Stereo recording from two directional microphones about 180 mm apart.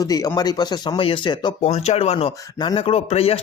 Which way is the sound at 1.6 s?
35° left (ahead or behind).